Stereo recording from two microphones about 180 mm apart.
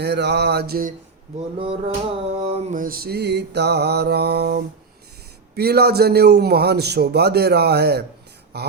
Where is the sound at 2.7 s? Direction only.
50° right (ahead or behind).